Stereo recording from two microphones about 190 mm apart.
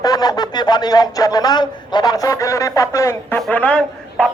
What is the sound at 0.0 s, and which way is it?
Speech, 20° left (ahead or behind).